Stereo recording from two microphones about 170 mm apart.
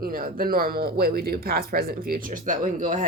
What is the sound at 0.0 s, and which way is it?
Speech, 60° right (ahead or behind).